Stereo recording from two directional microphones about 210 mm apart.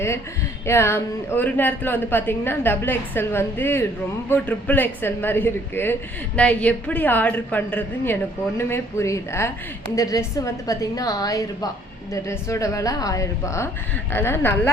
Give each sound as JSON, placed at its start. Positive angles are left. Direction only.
{"t": 0.6, "sound": "a man's voice", "side_deg": 10}